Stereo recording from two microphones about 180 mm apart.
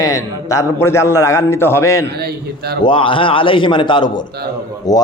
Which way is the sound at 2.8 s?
30° left (ahead or behind).